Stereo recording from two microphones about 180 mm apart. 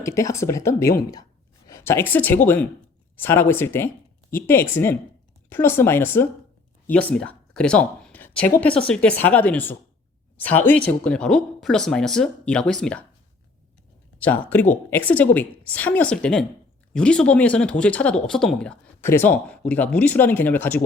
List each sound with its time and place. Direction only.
0.0 s a woman's voice: 15° left (ahead or behind)
14.2 s speech: 10° left (ahead or behind)